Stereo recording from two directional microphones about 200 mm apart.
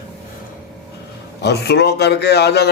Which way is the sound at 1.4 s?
55° left (ahead or behind).